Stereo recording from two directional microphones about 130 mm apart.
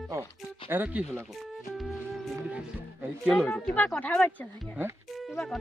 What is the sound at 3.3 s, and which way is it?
Speech, 5° left (ahead or behind).